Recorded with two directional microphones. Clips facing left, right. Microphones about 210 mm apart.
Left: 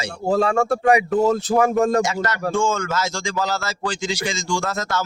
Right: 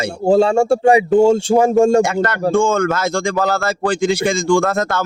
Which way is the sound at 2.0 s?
55° right (ahead or behind).